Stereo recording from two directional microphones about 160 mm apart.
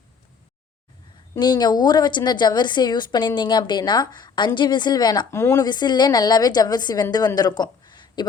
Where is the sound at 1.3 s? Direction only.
25° left (ahead or behind).